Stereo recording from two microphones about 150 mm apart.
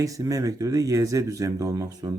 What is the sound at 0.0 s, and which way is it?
Speech, 20° right (ahead or behind).